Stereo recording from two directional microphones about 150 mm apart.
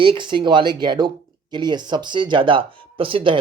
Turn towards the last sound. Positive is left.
turn(degrees=-35)  # may be behind; listen again after turning